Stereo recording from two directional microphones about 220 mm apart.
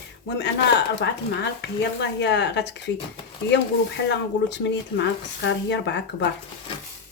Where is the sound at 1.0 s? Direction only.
50° left (ahead or behind).